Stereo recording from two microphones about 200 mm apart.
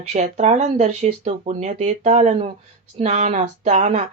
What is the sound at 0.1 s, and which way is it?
Speech, 35° right (ahead or behind).